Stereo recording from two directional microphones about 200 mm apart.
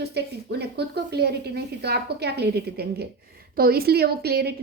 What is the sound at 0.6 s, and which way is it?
A woman's voice, 55° right (ahead or behind).